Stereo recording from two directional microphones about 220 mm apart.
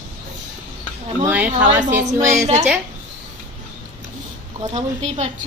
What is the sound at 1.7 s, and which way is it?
Speech, 35° right (ahead or behind).